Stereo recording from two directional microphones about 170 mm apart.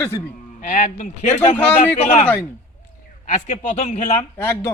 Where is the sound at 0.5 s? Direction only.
50° left (ahead or behind).